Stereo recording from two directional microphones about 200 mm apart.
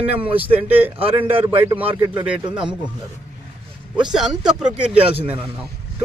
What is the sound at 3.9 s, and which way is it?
Speech, 5° right (ahead or behind).